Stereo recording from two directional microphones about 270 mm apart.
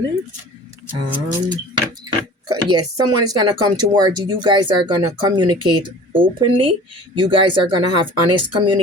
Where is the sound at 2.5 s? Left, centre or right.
Centre.